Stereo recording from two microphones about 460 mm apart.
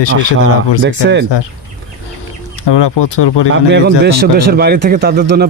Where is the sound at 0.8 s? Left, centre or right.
Right.